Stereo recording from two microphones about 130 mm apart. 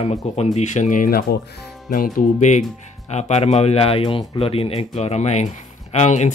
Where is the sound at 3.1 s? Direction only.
60° left (ahead or behind).